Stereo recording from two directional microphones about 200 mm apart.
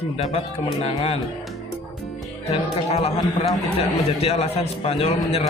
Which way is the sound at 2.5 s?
30° left (ahead or behind).